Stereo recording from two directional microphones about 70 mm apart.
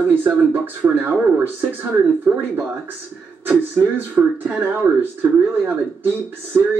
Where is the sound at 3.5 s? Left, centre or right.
Right.